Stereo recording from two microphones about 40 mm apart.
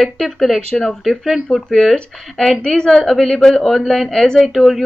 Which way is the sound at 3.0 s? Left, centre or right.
Centre.